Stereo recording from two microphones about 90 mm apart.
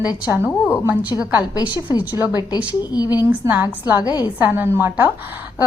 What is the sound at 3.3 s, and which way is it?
A woman's voice, 20° right (ahead or behind).